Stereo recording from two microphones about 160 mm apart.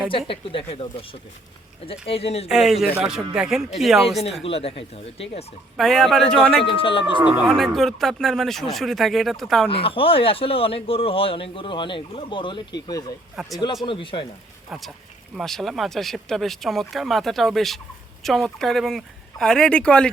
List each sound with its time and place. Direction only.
0.1 s a man's voice: 35° left (ahead or behind)
2.5 s speech: 5° right (ahead or behind)
4.4 s a man's voice: 35° left (ahead or behind)
5.7 s speech: centre (ahead or behind)
6.7 s a man's voice: 35° left (ahead or behind)
7.4 s speech: centre (ahead or behind)
9.6 s a man's voice: 35° left (ahead or behind)
13.3 s speech: centre (ahead or behind)
13.8 s a man's voice: 30° left (ahead or behind)
14.7 s speech: centre (ahead or behind)